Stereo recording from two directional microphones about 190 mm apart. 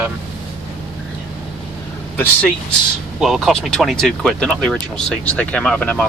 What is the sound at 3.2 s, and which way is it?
Speech, centre (ahead or behind).